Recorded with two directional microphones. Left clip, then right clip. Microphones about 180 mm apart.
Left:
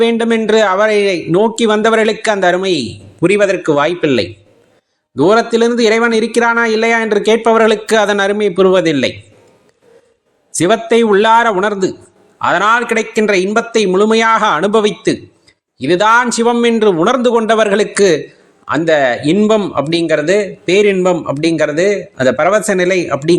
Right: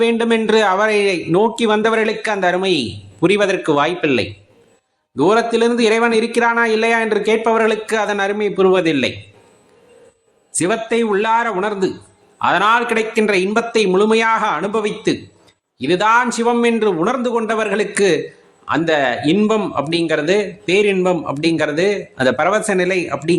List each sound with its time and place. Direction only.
0.0 s a man's voice: 20° left (ahead or behind)
10.5 s a man's voice: 30° left (ahead or behind)
15.8 s a man's voice: 25° left (ahead or behind)